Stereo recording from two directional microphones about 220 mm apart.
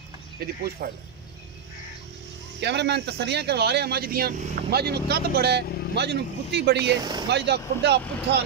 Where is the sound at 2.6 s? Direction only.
50° right (ahead or behind).